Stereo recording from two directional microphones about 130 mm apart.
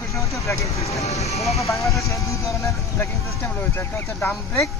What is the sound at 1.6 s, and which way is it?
Speech, 25° left (ahead or behind).